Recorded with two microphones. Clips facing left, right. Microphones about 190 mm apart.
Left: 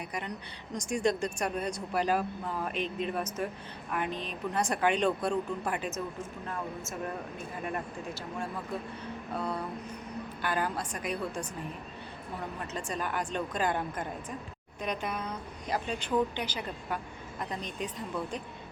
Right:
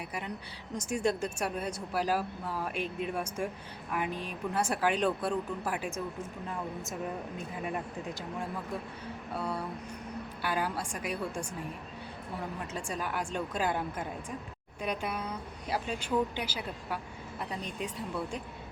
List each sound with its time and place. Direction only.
0.1 s speech: 5° right (ahead or behind)
9.3 s speech: 10° right (ahead or behind)
12.5 s speech: 5° right (ahead or behind)